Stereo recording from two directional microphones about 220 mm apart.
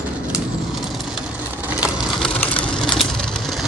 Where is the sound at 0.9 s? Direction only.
5° right (ahead or behind).